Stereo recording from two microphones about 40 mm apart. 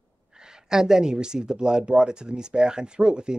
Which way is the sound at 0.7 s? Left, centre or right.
Centre.